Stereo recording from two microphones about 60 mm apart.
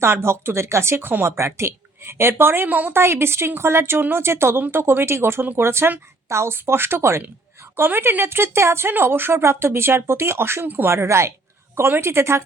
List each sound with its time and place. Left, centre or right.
0.0 s speech: right
2.9 s speech: right
10.9 s speech: right